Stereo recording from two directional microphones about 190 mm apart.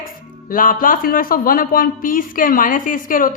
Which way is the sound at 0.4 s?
45° left (ahead or behind).